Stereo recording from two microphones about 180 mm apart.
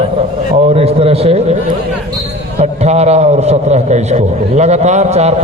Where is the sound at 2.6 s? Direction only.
35° right (ahead or behind).